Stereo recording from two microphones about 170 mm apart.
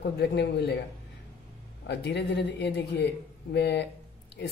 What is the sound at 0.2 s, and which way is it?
Speech, 75° left (ahead or behind).